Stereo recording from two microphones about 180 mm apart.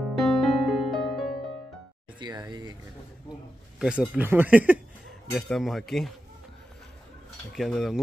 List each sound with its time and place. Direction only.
0.2 s music: centre (ahead or behind)
2.1 s a sound: 25° right (ahead or behind)
3.8 s speech: 5° right (ahead or behind)
5.3 s speech: centre (ahead or behind)
7.5 s speech: centre (ahead or behind)